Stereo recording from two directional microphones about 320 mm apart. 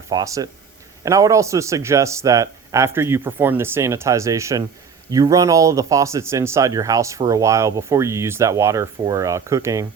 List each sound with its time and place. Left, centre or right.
0.1 s speech: centre